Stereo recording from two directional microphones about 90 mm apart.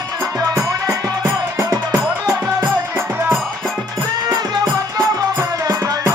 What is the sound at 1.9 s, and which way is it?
Music, 25° right (ahead or behind).